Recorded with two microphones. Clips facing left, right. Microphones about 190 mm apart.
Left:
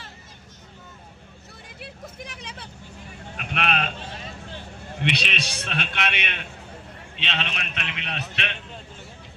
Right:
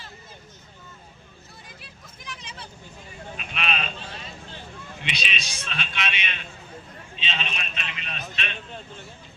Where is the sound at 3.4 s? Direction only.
60° left (ahead or behind).